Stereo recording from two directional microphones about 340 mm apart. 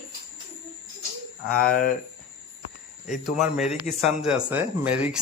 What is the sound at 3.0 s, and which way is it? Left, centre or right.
Speech, centre.